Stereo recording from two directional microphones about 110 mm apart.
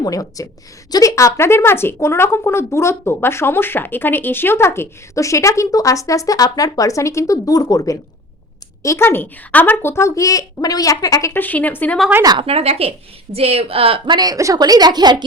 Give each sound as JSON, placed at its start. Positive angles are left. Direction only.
{"t": 0.0, "sound": "a woman's voice", "side_deg": 30}
{"t": 11.3, "sound": "a woman's voice", "side_deg": 15}
{"t": 12.4, "sound": "a woman's voice", "side_deg": -65}